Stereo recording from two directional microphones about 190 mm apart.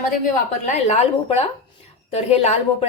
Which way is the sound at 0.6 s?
35° left (ahead or behind).